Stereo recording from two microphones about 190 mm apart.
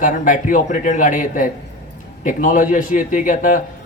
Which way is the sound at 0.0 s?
45° left (ahead or behind).